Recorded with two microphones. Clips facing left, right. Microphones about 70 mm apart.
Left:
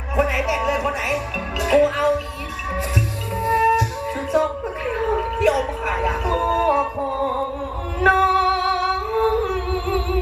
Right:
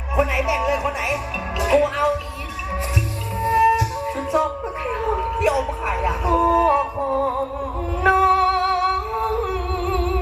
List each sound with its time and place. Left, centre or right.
0.2 s music: right
3.4 s music: right
5.0 s a sound: right
6.1 s music: right